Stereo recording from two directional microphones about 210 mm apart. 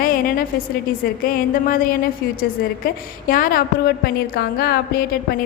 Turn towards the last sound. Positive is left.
turn(degrees=50)  # may be behind; listen again after turning